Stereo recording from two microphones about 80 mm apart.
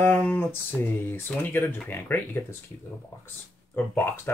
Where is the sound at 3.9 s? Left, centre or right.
Left.